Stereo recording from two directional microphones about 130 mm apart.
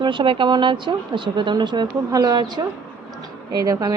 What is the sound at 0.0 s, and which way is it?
A woman's voice, 40° right (ahead or behind).